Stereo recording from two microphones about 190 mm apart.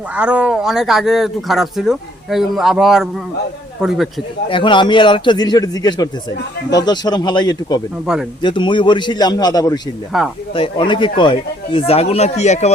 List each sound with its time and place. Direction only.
0.1 s speech: 5° right (ahead or behind)
4.4 s a man's voice: 25° left (ahead or behind)
8.0 s speech: 5° right (ahead or behind)
8.4 s a man's voice: 25° left (ahead or behind)
10.1 s speech: centre (ahead or behind)
10.5 s speech: 25° left (ahead or behind)